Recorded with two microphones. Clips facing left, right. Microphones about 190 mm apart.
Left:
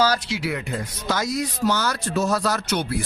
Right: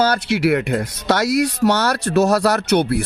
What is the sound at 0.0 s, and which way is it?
Speech, 65° right (ahead or behind).